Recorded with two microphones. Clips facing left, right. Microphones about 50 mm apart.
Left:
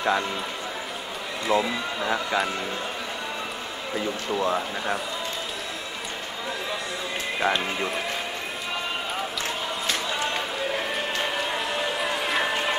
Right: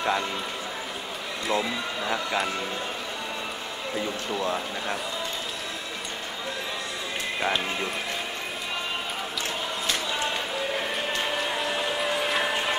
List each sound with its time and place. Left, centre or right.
0.0 s speech: centre
1.5 s speech: centre
3.9 s speech: centre
7.3 s speech: centre
9.8 s a sound: centre